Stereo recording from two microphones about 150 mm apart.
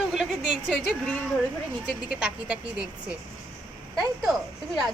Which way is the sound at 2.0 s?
5° right (ahead or behind).